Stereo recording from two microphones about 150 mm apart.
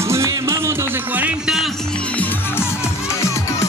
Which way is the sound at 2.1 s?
15° left (ahead or behind).